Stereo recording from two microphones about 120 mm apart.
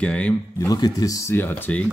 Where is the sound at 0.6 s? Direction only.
30° left (ahead or behind); by 1.8 s 15° left (ahead or behind).